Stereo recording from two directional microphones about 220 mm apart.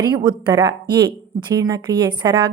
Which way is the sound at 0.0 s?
20° right (ahead or behind).